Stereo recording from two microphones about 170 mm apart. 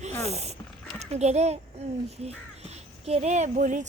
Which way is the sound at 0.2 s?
40° right (ahead or behind).